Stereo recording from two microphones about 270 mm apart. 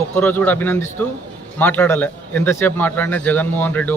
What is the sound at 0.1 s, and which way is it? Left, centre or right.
A man's voice, centre.